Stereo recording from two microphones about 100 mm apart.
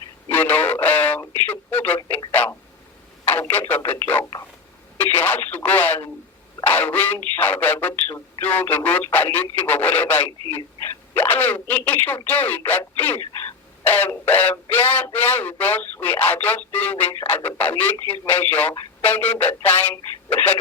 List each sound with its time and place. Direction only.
0.3 s radio: 15° left (ahead or behind)
2.3 s a sound: 15° left (ahead or behind)
3.5 s radio: 20° left (ahead or behind)
6.7 s a sound: 15° left (ahead or behind)
7.3 s radio: 15° left (ahead or behind)
11.1 s telephone dialing: 20° left (ahead or behind)
13.8 s a sound: 20° left (ahead or behind)
15.1 s radio: 20° left (ahead or behind)
19.0 s telephone: 15° left (ahead or behind)